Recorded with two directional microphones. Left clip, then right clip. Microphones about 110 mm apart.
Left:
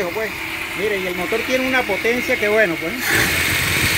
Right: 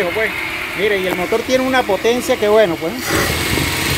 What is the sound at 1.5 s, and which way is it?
Speech, 10° right (ahead or behind).